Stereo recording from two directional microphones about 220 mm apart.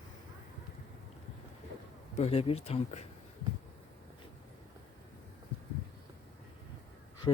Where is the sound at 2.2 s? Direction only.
25° left (ahead or behind).